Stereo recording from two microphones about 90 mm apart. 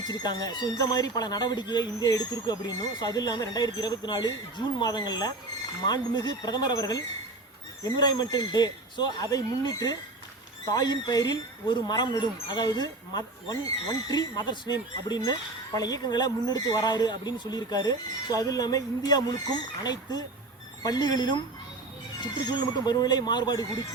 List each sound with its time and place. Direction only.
0.1 s speech: 50° left (ahead or behind)